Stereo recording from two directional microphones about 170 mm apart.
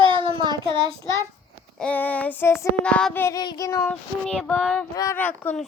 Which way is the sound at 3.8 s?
5° left (ahead or behind).